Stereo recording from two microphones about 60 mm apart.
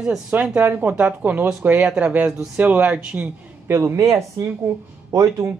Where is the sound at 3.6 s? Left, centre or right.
Right.